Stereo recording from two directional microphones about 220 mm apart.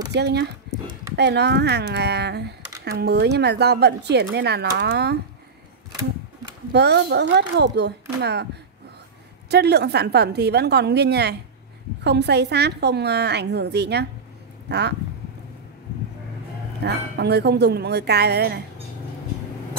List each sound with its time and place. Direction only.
0.1 s speech: 50° right (ahead or behind)
5.9 s sewing machine: 15° right (ahead or behind)
6.7 s speech: 50° right (ahead or behind)
9.5 s speech: 50° right (ahead or behind)
16.8 s speech: 50° right (ahead or behind)